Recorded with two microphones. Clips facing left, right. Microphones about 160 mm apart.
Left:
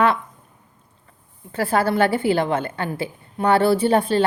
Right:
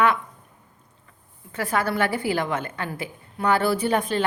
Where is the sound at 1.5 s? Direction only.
30° left (ahead or behind).